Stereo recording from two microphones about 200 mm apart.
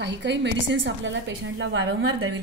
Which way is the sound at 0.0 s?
60° right (ahead or behind).